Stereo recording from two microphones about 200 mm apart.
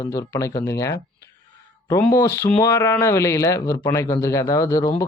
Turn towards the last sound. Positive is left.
turn(degrees=15)  # may be behind; listen again after turning